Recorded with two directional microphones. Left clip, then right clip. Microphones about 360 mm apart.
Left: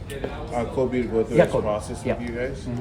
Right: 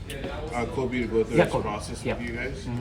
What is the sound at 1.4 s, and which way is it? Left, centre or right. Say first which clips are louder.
Speech: left 4 dB; centre.